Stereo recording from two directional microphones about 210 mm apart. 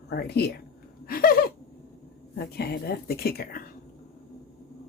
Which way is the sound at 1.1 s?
45° left (ahead or behind).